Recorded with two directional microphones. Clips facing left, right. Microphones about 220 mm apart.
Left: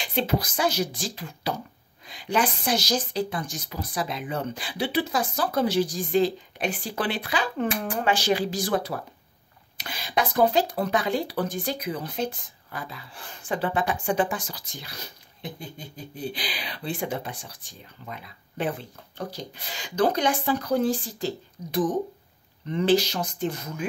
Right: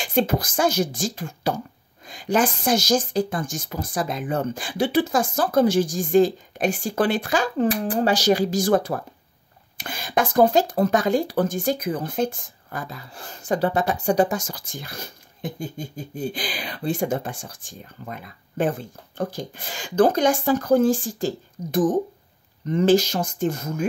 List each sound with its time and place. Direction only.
0.0 s speech: 45° right (ahead or behind)